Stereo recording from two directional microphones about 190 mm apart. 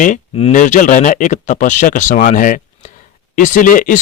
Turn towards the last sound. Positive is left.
turn(degrees=45)  # may be behind; listen again after turning